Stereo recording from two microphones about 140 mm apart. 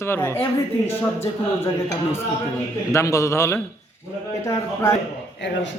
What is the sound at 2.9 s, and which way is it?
Speech, 20° left (ahead or behind).